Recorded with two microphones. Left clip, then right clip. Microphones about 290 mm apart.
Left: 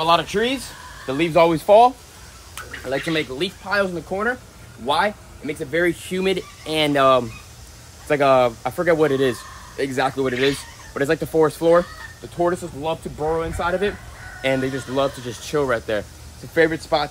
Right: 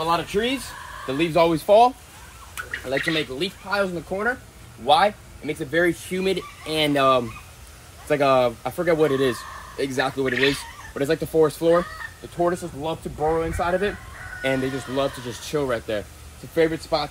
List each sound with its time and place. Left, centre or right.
0.1 s speech: centre
2.5 s fowl: centre
3.1 s speech: centre
4.8 s speech: centre
6.0 s speech: centre
12.8 s speech: centre
14.4 s speech: centre